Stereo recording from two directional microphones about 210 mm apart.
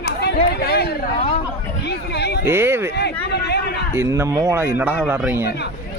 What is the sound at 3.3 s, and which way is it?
Speech, 50° left (ahead or behind).